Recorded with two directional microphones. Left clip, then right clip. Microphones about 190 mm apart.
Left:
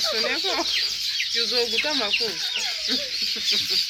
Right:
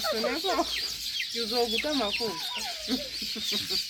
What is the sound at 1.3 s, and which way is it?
Speech, 60° right (ahead or behind).